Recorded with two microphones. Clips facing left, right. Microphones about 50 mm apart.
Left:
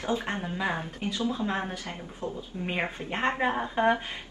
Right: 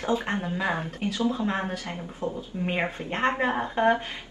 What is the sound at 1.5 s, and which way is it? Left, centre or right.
A woman's voice, centre.